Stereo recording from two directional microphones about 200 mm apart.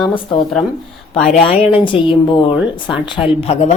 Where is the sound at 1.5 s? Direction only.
25° left (ahead or behind).